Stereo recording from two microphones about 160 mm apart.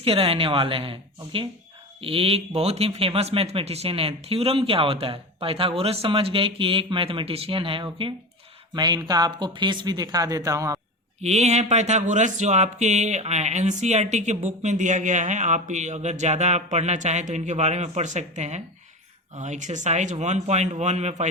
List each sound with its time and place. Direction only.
0.0 s speech: 35° right (ahead or behind); by 10.8 s 20° right (ahead or behind)
11.2 s speech: 45° right (ahead or behind)